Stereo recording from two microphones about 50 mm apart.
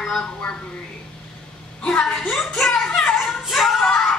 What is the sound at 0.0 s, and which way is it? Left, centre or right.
Speech, centre.